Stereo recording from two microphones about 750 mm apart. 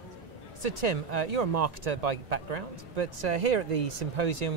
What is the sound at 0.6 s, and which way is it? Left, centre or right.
Speech, right.